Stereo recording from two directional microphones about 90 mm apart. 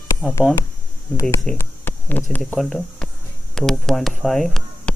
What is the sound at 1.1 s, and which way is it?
Speech, 40° left (ahead or behind).